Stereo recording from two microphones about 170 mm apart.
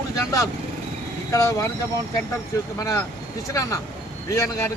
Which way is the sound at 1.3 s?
20° left (ahead or behind).